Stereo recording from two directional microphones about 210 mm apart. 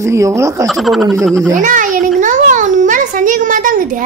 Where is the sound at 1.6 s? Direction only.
35° right (ahead or behind).